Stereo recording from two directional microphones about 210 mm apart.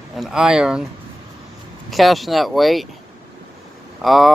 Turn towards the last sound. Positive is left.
turn(degrees=0)  # may be behind; listen again after turning